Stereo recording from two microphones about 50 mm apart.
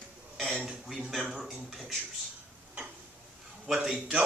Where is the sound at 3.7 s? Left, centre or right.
Centre.